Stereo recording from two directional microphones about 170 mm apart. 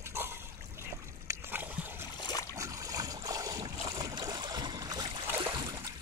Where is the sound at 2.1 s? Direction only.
25° left (ahead or behind).